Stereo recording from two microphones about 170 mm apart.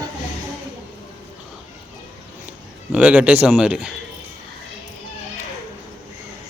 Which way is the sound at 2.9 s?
5° right (ahead or behind).